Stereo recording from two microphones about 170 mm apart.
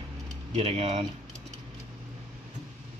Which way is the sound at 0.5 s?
35° right (ahead or behind).